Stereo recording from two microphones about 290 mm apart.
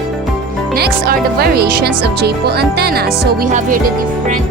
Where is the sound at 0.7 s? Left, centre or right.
Right.